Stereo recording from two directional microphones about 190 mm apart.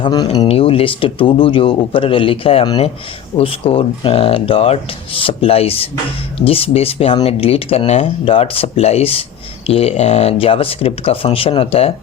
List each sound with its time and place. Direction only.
0.0 s speech: 20° left (ahead or behind)